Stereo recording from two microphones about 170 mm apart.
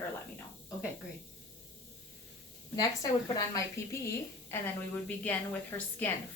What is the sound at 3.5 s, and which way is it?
A woman's voice, 15° left (ahead or behind).